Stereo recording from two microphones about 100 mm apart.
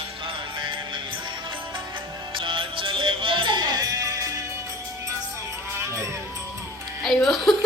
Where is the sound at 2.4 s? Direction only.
60° right (ahead or behind); by 4.3 s 35° right (ahead or behind).